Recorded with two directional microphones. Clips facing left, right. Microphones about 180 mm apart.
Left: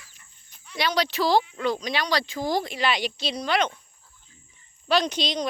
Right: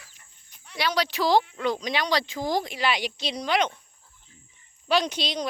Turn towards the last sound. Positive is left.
turn(degrees=-10)  # may be behind; listen again after turning